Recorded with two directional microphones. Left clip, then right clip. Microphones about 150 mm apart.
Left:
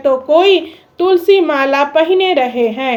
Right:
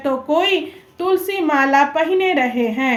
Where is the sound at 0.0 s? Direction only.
30° left (ahead or behind).